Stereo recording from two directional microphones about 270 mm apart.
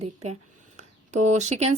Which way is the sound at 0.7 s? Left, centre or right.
Right.